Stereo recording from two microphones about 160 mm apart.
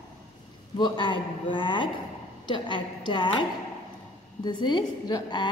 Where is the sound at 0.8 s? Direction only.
30° left (ahead or behind).